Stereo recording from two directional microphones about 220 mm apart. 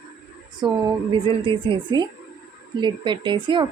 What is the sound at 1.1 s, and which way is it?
Speech, 25° right (ahead or behind).